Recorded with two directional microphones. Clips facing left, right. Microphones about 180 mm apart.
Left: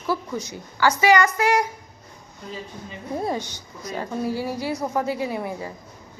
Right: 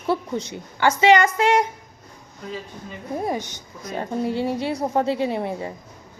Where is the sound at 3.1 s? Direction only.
15° right (ahead or behind).